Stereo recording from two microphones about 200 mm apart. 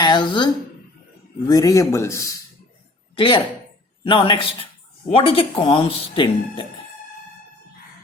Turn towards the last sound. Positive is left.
turn(degrees=25)  # may be behind; listen again after turning